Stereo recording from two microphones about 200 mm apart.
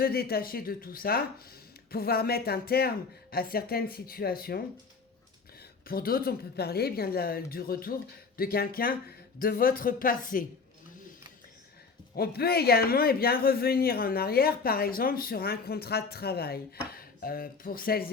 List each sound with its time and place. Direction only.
0.0 s speech: 50° left (ahead or behind)
5.9 s speech: 45° left (ahead or behind)
12.1 s speech: 50° left (ahead or behind)